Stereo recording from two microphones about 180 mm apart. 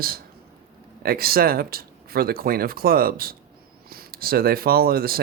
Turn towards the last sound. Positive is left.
turn(degrees=-55)  # may be behind; listen again after turning